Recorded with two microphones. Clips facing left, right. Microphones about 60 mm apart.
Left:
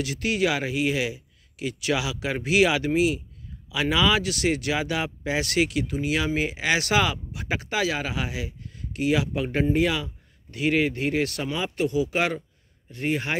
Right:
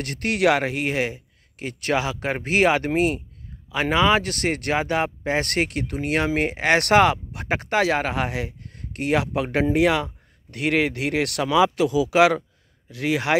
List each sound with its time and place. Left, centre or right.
0.0 s speech: right
3.7 s speech: right
12.9 s speech: right